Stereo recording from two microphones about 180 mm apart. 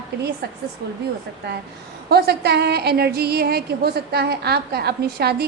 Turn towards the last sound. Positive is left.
turn(degrees=-60)  # may be behind; listen again after turning